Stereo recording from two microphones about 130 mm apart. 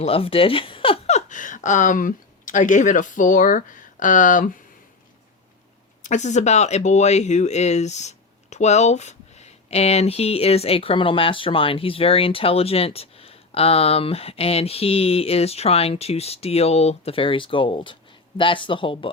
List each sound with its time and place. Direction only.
0.0 s speech: 45° left (ahead or behind); by 4.5 s 90° left
6.0 s speech: 65° left (ahead or behind); by 19.1 s 40° left (ahead or behind)